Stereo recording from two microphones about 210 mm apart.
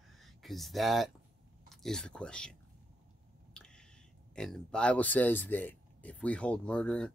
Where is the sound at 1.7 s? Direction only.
Centre (ahead or behind).